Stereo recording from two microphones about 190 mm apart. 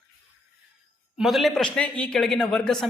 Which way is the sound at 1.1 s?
Centre (ahead or behind).